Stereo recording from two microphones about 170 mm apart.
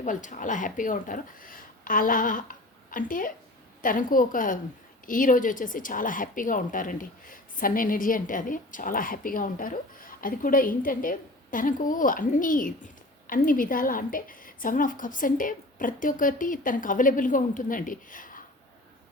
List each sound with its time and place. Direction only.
0.0 s a woman's voice: 50° left (ahead or behind)